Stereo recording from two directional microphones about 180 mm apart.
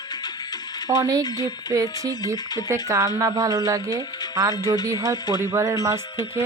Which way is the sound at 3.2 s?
20° right (ahead or behind).